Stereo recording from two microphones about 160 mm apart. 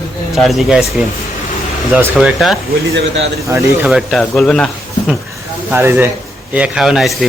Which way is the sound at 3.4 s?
15° right (ahead or behind).